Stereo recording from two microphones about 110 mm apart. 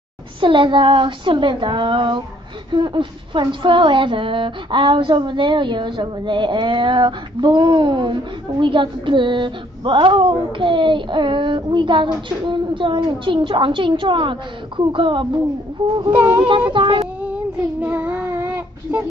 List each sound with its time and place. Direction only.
0.4 s speech: 45° right (ahead or behind)
16.1 s speech: 15° right (ahead or behind)
16.3 s speech: 50° right (ahead or behind)
17.0 s child singing: 10° right (ahead or behind)